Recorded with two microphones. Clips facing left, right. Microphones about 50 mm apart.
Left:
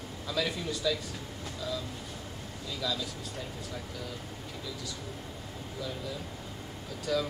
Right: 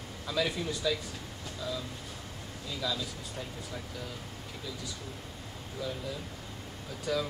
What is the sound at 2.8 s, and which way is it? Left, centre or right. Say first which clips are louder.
Speech: even; centre.